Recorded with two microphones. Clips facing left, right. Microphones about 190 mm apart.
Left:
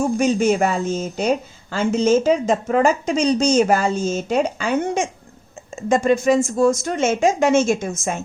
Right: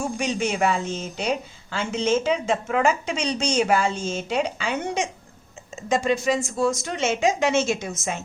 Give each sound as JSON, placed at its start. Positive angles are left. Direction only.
{"t": 0.0, "sound": "speech", "side_deg": 45}